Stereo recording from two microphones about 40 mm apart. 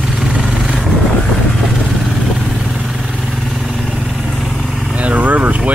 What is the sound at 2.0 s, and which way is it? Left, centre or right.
Vehicle, centre.